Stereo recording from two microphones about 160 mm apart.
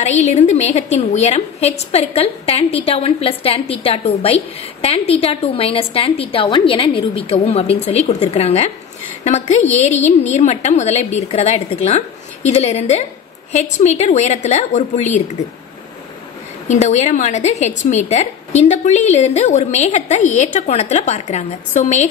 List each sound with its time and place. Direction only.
0.0 s a woman's voice: 45° left (ahead or behind)
16.6 s a woman's voice: 45° left (ahead or behind)